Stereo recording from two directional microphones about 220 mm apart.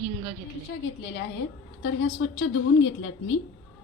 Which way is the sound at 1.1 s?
55° left (ahead or behind).